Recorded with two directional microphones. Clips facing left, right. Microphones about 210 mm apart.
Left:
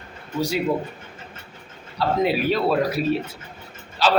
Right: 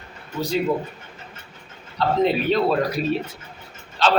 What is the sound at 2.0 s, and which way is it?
A man's voice, 5° left (ahead or behind).